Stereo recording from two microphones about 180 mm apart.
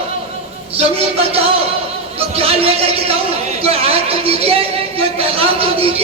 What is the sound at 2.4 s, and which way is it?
A man's voice, 30° right (ahead or behind).